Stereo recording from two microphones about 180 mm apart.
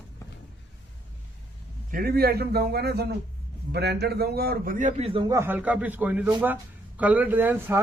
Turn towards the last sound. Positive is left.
turn(degrees=-10)  # may be behind; listen again after turning